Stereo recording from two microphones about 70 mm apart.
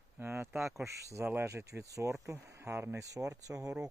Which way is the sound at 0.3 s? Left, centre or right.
Right.